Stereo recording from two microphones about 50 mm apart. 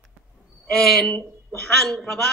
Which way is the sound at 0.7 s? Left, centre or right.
Centre.